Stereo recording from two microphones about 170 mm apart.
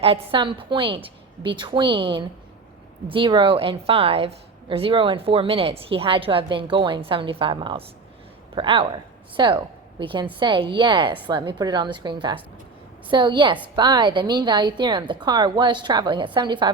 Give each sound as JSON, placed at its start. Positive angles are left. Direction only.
{"t": 0.0, "sound": "a woman's voice", "side_deg": -35}